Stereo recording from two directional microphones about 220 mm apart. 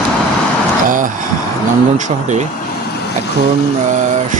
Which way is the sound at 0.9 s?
40° right (ahead or behind).